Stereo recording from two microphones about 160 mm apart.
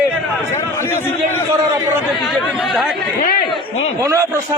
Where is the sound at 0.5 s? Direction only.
15° left (ahead or behind).